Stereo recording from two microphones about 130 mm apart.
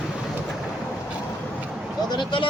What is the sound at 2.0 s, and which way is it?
Speech, 35° left (ahead or behind).